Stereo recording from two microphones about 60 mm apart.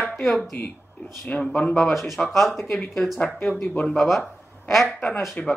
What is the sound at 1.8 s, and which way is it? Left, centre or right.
Speech, centre.